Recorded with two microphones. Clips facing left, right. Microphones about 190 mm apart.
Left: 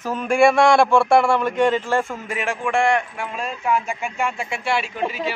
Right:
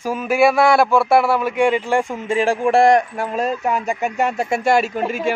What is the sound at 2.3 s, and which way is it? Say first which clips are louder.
A man's voice: right 7 dB; 35° right (ahead or behind).